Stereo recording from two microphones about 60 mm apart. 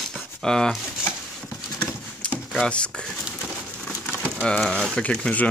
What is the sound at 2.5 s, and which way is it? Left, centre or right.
Speech, centre.